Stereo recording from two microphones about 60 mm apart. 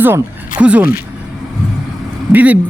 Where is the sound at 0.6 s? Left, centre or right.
Right.